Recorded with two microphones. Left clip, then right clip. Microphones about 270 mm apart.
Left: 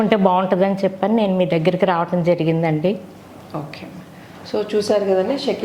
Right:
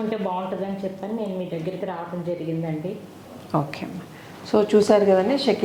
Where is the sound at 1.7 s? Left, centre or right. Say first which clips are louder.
Left 12 dB; left.